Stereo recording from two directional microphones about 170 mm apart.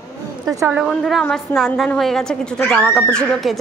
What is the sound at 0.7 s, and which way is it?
Speech, centre (ahead or behind).